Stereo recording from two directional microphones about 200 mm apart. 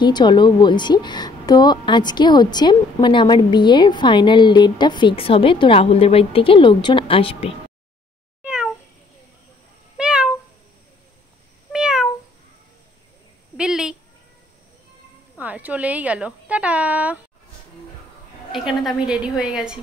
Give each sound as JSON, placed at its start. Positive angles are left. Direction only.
{"t": 0.0, "sound": "a woman's voice", "side_deg": 20}
{"t": 8.4, "sound": "cat", "side_deg": -5}
{"t": 9.9, "sound": "meow", "side_deg": -5}
{"t": 11.7, "sound": "cat", "side_deg": -5}
{"t": 13.6, "sound": "a sound", "side_deg": -5}
{"t": 15.3, "sound": "a woman's voice", "side_deg": -10}
{"t": 18.5, "sound": "a woman's voice", "side_deg": 0}